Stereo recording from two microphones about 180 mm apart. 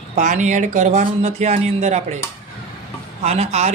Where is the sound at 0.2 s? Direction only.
40° right (ahead or behind).